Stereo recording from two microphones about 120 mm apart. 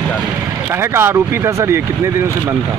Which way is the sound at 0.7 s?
20° right (ahead or behind).